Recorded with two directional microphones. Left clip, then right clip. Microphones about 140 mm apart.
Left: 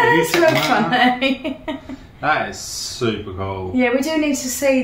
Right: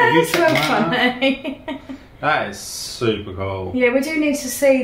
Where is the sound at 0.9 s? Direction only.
25° left (ahead or behind).